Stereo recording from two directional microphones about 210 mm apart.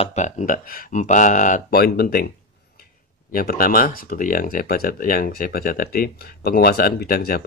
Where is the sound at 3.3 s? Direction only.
45° left (ahead or behind).